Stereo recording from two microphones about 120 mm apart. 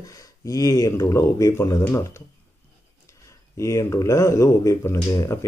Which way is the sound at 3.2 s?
25° left (ahead or behind).